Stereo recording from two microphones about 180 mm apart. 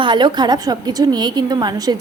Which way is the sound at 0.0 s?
25° right (ahead or behind).